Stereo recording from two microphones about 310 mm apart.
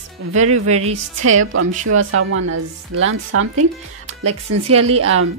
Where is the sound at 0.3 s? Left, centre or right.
Right.